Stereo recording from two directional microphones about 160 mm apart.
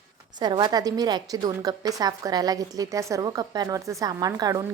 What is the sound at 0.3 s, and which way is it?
A woman's voice, 30° right (ahead or behind).